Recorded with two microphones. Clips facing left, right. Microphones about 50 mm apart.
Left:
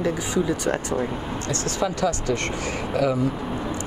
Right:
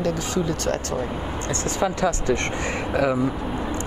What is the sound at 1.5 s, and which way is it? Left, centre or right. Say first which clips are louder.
Speech: right 1 dB; right.